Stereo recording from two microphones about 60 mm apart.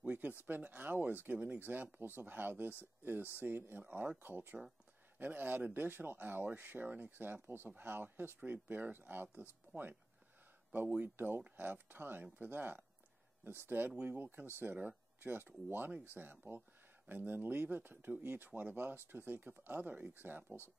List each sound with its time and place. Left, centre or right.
0.0 s speech: right